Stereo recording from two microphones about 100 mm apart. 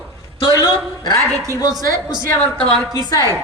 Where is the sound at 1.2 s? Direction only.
30° right (ahead or behind).